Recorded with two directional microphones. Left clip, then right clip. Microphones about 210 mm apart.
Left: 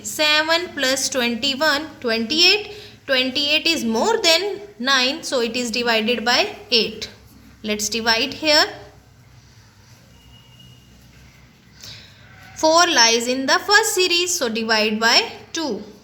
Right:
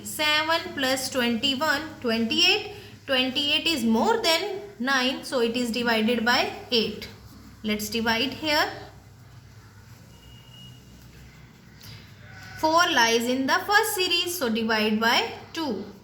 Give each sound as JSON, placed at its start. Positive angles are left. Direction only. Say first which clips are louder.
{"t": 0.2, "sound": "a woman's voice", "louder": "left 6 dB", "side_deg": 45}
{"t": 12.5, "sound": "a woman's voice", "louder": "left 6 dB", "side_deg": 45}